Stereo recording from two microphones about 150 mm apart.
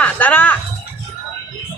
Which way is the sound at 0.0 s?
10° left (ahead or behind).